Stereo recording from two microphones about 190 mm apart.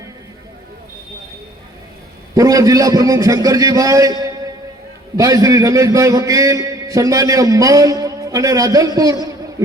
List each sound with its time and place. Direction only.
2.3 s a man's voice: 20° right (ahead or behind)